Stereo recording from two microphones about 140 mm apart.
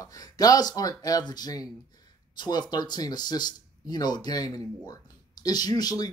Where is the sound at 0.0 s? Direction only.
25° left (ahead or behind).